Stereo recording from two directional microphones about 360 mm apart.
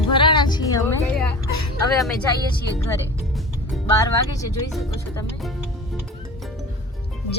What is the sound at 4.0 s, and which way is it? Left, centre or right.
A woman's voice, centre.